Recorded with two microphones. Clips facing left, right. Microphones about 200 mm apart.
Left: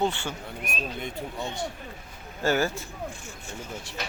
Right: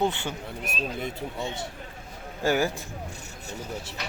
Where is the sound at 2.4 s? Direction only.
15° right (ahead or behind).